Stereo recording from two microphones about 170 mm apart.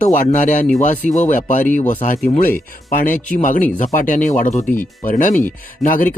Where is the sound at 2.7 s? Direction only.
55° left (ahead or behind).